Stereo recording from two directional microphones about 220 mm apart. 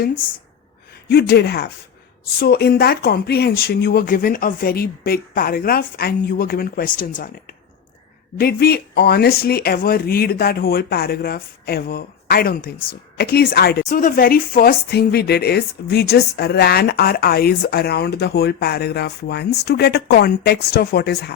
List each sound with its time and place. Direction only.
1.0 s speech: 50° left (ahead or behind)
8.4 s speech: 45° left (ahead or behind)